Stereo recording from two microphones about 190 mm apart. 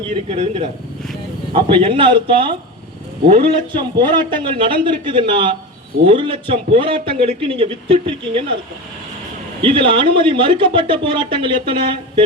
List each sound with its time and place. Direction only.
0.3 s a man's voice: 30° right (ahead or behind)
9.6 s speech: 25° right (ahead or behind)